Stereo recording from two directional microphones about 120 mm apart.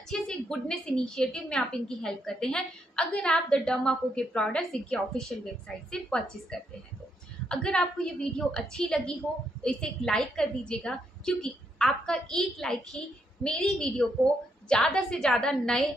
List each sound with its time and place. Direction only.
0.1 s a woman's voice: 5° left (ahead or behind)